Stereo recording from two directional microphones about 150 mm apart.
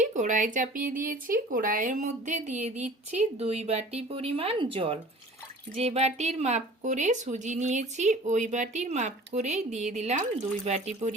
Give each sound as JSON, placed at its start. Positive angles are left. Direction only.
{"t": 0.0, "sound": "speech", "side_deg": -55}